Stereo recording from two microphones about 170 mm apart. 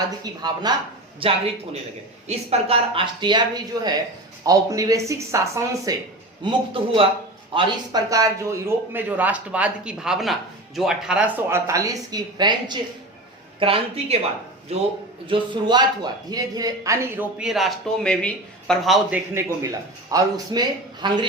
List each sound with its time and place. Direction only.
0.3 s a man's voice: 25° right (ahead or behind)
6.4 s a man's voice: 30° right (ahead or behind)
15.3 s speech: 25° right (ahead or behind); by 19.2 s centre (ahead or behind)
19.3 s speech: 15° right (ahead or behind)